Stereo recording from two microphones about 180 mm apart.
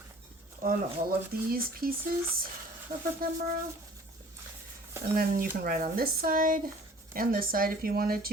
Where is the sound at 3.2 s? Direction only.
55° right (ahead or behind).